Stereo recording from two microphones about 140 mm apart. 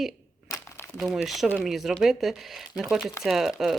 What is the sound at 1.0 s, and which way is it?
A woman's voice, 5° right (ahead or behind).